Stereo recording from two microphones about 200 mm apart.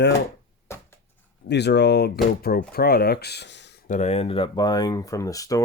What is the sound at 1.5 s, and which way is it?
Speech, 55° left (ahead or behind).